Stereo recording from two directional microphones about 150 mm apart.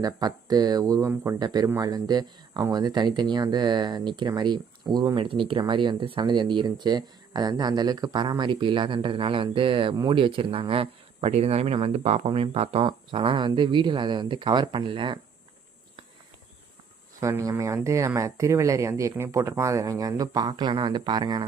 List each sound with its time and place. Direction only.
0.0 s speech: 25° right (ahead or behind)
17.2 s speech: 20° right (ahead or behind)